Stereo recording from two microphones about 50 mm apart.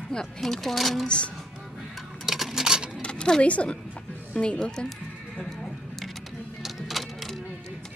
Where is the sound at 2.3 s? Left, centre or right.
Centre.